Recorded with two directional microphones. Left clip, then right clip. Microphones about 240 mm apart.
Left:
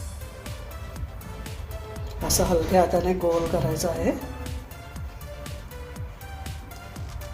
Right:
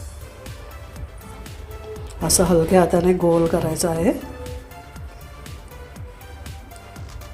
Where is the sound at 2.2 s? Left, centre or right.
Right.